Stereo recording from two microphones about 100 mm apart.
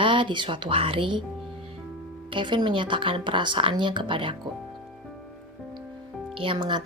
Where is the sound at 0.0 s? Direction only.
55° right (ahead or behind).